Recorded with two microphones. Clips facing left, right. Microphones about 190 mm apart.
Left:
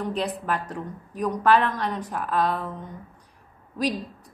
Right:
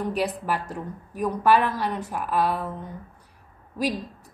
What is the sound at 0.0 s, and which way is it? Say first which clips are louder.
A woman's voice: right 1 dB; 10° right (ahead or behind).